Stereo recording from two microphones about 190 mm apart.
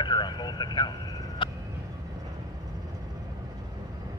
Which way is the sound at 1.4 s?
25° left (ahead or behind).